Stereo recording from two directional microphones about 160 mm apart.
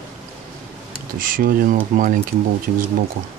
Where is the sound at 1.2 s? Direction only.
60° right (ahead or behind).